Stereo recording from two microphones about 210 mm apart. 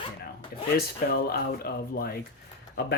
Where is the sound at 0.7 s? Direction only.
45° left (ahead or behind).